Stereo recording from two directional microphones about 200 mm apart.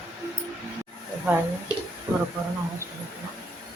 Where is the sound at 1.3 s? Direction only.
10° right (ahead or behind).